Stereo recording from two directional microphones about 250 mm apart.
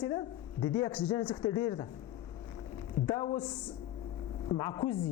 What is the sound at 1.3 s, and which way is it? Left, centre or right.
Speech, centre.